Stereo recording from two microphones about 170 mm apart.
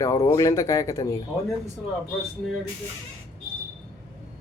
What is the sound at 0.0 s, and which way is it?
Speech, 20° left (ahead or behind).